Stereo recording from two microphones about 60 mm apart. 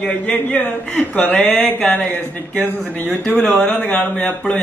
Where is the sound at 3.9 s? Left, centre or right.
Left.